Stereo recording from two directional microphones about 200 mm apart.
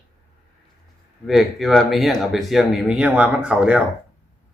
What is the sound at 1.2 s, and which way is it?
Speech, centre (ahead or behind).